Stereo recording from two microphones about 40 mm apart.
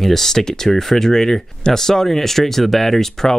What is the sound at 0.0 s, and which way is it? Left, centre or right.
Speech, centre.